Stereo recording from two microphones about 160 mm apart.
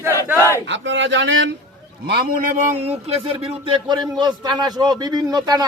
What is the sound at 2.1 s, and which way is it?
A man's voice, 70° right (ahead or behind).